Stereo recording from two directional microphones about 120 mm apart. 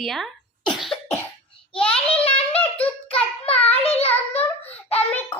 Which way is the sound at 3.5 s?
10° left (ahead or behind).